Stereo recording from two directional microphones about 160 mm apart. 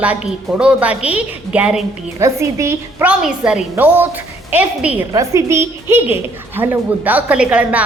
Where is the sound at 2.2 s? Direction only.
20° right (ahead or behind).